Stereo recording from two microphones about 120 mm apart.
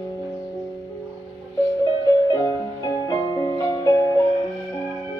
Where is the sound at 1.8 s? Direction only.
30° left (ahead or behind).